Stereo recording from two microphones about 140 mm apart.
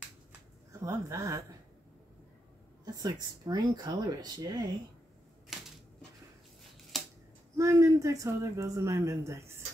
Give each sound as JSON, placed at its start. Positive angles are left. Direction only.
{"t": 0.7, "sound": "speech", "side_deg": -20}
{"t": 2.8, "sound": "speech", "side_deg": -30}
{"t": 6.9, "sound": "a sound", "side_deg": 0}
{"t": 7.5, "sound": "speech", "side_deg": -20}